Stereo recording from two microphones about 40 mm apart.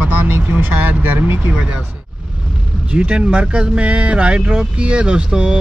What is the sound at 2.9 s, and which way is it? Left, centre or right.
Speech, right.